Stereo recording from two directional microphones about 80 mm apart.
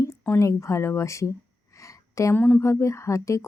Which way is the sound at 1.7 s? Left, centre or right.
Left.